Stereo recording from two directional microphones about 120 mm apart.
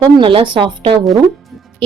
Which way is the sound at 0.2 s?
45° right (ahead or behind).